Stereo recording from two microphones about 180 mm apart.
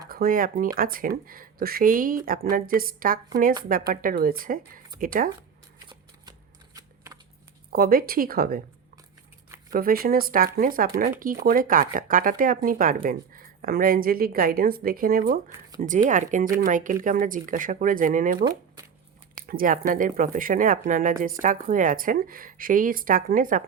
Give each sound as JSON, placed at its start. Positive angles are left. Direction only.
{"t": 0.1, "sound": "speech", "side_deg": -55}
{"t": 6.7, "sound": "a sound", "side_deg": -20}
{"t": 7.7, "sound": "speech", "side_deg": -55}
{"t": 9.7, "sound": "speech", "side_deg": -55}
{"t": 19.5, "sound": "speech", "side_deg": -50}